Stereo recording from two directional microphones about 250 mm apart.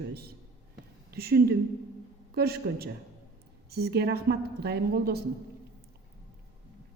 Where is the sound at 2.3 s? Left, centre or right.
Right.